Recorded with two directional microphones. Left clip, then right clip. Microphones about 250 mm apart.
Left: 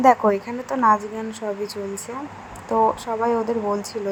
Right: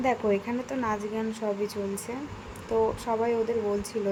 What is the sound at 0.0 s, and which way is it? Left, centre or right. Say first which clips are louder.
Speech: left 10 dB; centre.